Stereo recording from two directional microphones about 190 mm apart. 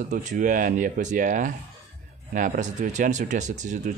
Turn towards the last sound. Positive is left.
turn(degrees=-40)  # may be behind; listen again after turning